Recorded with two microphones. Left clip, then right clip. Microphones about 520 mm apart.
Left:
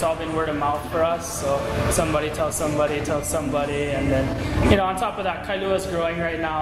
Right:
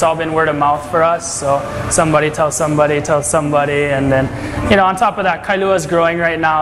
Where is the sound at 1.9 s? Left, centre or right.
Right.